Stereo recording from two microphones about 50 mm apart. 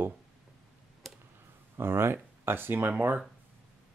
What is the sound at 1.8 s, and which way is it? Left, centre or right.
Speech, right.